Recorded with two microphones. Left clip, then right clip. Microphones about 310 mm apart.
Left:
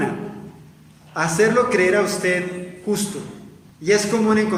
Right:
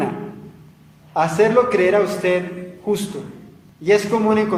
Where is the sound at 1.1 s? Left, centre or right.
Centre.